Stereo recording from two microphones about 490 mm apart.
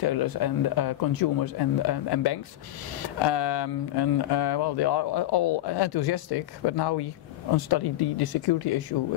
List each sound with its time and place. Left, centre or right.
0.0 s speech: left